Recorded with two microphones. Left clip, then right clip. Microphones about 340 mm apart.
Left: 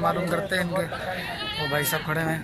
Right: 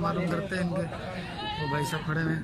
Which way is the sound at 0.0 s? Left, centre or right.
Left.